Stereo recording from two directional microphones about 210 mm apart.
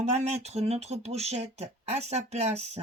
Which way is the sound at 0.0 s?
30° right (ahead or behind).